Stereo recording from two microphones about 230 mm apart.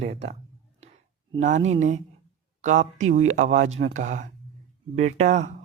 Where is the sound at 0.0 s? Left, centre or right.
Right.